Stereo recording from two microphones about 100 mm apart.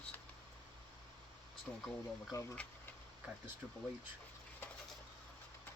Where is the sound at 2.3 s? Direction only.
35° left (ahead or behind).